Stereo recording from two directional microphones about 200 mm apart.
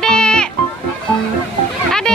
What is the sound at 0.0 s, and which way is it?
Music, 5° left (ahead or behind).